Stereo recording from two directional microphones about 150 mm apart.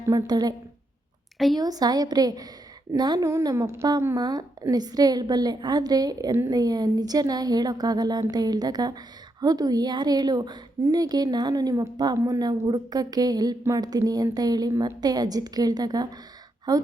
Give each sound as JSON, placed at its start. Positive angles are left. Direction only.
{"t": 0.0, "sound": "speech", "side_deg": -20}
{"t": 1.5, "sound": "speech", "side_deg": -25}